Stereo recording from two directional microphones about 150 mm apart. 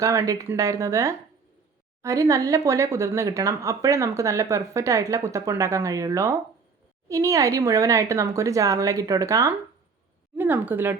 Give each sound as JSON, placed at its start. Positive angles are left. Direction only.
{"t": 0.0, "sound": "a woman's voice", "side_deg": -20}